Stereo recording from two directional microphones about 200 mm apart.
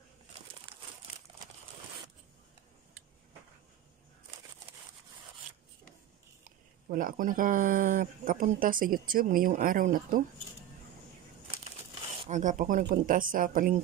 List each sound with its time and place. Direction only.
6.4 s speech: 45° right (ahead or behind)
12.2 s speech: 40° right (ahead or behind)